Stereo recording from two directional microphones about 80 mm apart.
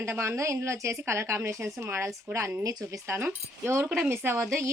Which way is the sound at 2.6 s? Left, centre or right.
Right.